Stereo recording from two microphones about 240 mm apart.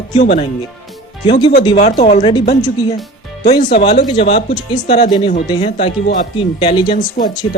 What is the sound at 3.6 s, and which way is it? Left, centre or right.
Speech, left.